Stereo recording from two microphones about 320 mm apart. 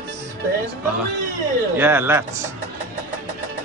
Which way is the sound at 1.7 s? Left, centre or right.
Centre.